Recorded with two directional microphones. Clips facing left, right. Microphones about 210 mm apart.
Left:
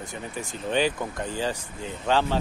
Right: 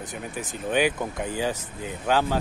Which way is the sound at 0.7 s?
10° right (ahead or behind).